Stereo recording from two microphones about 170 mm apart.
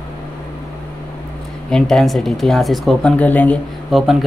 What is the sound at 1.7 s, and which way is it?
Speech, 5° left (ahead or behind).